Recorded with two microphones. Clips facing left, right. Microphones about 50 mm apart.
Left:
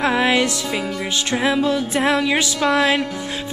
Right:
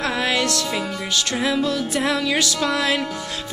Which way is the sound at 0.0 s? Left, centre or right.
Left.